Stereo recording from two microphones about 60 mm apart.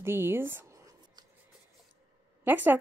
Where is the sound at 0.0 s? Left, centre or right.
Right.